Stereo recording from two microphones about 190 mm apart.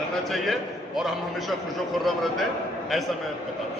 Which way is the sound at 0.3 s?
Centre (ahead or behind).